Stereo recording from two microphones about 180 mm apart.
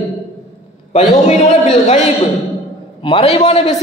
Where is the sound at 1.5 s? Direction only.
40° left (ahead or behind).